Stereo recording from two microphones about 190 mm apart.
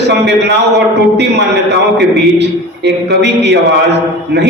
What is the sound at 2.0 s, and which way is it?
A man's voice, 65° right (ahead or behind).